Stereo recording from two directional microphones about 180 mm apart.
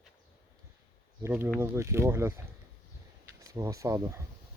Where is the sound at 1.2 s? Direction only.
10° right (ahead or behind).